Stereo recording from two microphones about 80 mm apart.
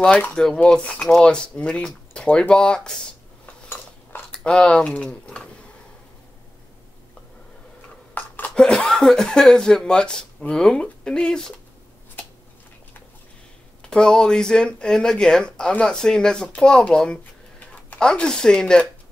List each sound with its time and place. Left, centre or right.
0.3 s speech: centre
3.6 s dishes: left
4.3 s speech: centre
8.2 s a sound: left
8.5 s speech: centre
13.8 s speech: centre